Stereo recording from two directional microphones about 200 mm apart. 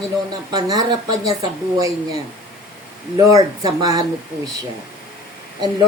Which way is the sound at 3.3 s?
20° right (ahead or behind).